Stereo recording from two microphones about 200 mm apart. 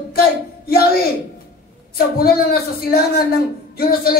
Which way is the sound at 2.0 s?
50° left (ahead or behind).